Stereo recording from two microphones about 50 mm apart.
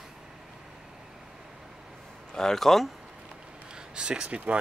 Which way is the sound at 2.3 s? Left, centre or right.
Centre.